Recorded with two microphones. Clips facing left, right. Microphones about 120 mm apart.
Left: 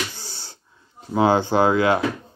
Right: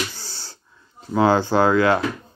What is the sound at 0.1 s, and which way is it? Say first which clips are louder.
Gasp: even; 15° left (ahead or behind).